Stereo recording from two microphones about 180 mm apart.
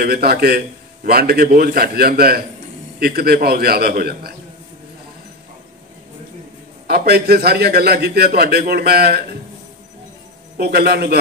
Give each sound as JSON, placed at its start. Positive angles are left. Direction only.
{"t": 0.0, "sound": "a man's voice", "side_deg": -60}
{"t": 6.9, "sound": "a man's voice", "side_deg": -60}
{"t": 10.6, "sound": "a man's voice", "side_deg": -60}